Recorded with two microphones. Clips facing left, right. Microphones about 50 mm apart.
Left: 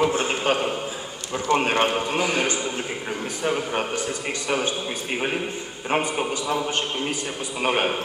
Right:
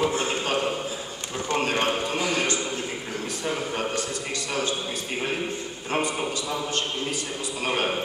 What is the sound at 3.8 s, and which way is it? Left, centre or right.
A man's voice, left.